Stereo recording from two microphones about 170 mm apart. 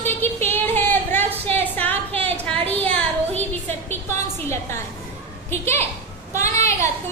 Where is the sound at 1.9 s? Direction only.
35° right (ahead or behind).